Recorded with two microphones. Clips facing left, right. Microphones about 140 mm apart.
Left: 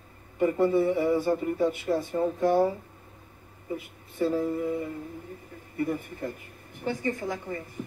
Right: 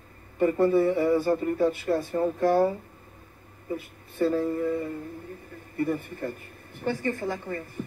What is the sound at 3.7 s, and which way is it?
Speech, 10° left (ahead or behind).